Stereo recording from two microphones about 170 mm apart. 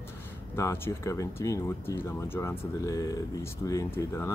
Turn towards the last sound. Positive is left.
turn(degrees=15)  # may be behind; listen again after turning